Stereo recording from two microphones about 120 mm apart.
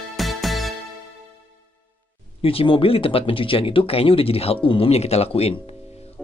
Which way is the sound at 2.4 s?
50° left (ahead or behind).